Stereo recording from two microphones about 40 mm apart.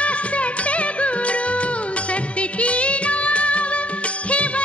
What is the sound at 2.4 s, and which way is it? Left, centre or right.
Music, left.